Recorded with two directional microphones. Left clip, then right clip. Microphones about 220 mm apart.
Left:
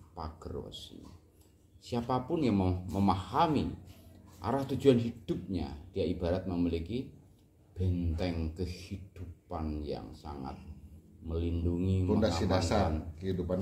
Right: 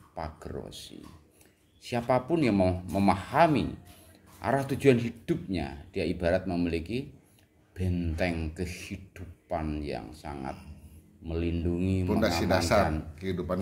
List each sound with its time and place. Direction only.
0.1 s speech: 20° right (ahead or behind)
12.2 s speech: 40° right (ahead or behind)